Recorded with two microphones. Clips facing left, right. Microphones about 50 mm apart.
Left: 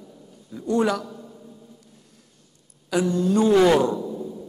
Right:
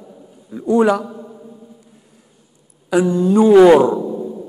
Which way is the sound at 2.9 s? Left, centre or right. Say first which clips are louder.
Right 7 dB; centre.